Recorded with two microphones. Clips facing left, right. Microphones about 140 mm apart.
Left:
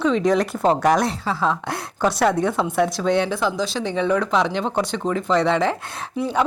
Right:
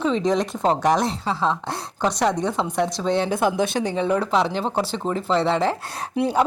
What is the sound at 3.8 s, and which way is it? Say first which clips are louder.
Speech: left 1 dB; 35° right (ahead or behind).